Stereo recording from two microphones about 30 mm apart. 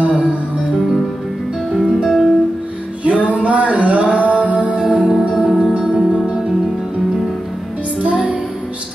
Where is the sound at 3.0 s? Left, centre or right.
Right.